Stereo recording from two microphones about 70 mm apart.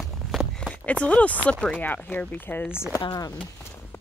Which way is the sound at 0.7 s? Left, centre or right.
Centre.